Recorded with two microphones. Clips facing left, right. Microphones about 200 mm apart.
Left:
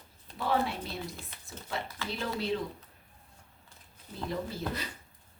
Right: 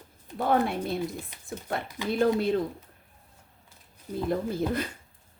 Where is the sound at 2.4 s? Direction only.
50° right (ahead or behind).